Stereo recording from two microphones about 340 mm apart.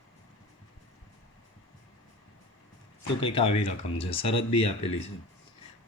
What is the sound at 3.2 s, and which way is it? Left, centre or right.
Speech, centre.